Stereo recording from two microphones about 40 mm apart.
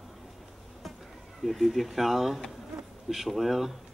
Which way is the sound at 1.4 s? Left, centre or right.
Centre.